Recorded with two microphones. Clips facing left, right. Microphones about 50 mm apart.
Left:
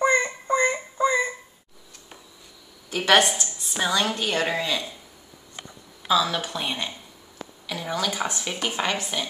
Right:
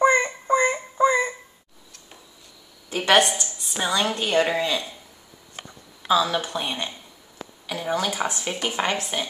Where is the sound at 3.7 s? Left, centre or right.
Centre.